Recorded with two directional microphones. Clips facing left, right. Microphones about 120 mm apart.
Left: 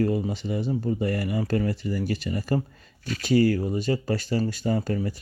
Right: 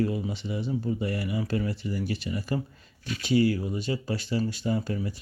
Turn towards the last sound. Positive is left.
turn(degrees=45)  # may be behind; listen again after turning